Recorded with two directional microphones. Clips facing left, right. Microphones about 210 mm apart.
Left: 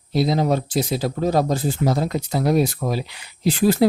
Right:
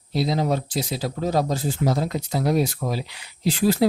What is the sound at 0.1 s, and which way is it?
Speech, 50° left (ahead or behind).